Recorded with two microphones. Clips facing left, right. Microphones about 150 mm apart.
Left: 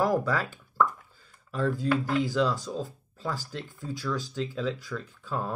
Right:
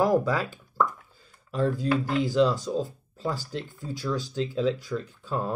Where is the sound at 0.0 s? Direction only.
20° right (ahead or behind).